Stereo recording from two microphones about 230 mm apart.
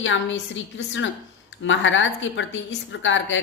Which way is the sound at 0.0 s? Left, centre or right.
Left.